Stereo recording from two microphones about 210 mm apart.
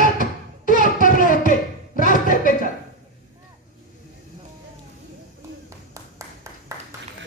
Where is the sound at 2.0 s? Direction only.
40° left (ahead or behind).